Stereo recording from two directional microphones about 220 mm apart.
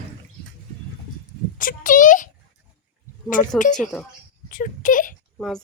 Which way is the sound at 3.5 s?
35° left (ahead or behind).